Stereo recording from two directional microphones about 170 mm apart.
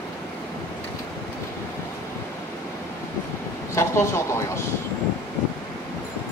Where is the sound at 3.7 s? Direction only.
15° left (ahead or behind).